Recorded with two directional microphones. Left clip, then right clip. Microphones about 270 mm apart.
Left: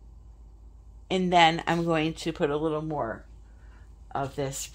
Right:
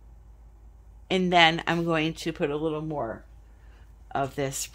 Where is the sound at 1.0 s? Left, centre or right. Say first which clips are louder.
Right 1 dB; centre.